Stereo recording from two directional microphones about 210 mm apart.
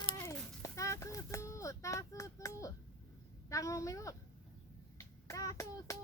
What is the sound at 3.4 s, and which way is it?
A woman's voice, 15° left (ahead or behind).